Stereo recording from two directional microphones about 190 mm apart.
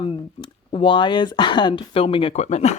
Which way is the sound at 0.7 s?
25° left (ahead or behind).